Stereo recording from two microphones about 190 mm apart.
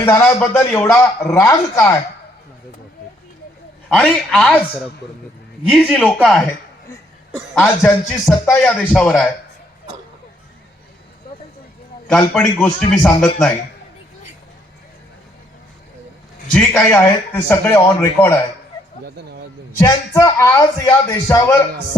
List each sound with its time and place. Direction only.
0.0 s a man's voice: 10° left (ahead or behind)
3.8 s a man's voice: centre (ahead or behind)
12.3 s a man's voice: 5° left (ahead or behind)
16.5 s a man's voice: 5° left (ahead or behind)
19.0 s a sound: 60° right (ahead or behind)
19.8 s a man's voice: 15° left (ahead or behind)